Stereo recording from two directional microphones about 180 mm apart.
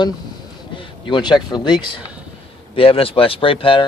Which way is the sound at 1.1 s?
25° left (ahead or behind).